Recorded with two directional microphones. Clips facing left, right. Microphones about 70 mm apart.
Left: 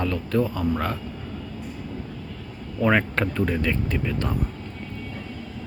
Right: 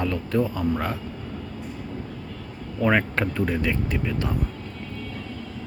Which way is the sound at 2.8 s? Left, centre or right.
Centre.